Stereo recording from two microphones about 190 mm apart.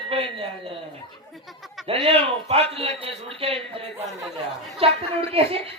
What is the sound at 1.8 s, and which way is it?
A man's voice, 30° right (ahead or behind).